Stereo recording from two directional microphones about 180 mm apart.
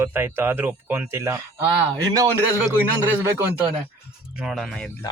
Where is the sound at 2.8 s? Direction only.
10° right (ahead or behind).